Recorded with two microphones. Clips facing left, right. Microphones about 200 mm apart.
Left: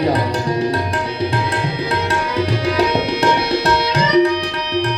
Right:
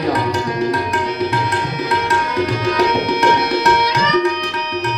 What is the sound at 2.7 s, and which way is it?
Tabla, 30° left (ahead or behind).